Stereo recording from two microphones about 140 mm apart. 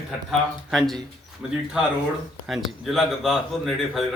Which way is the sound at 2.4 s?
Centre (ahead or behind).